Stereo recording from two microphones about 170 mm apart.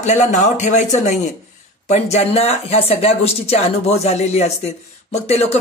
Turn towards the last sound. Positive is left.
turn(degrees=40)  # may be behind; listen again after turning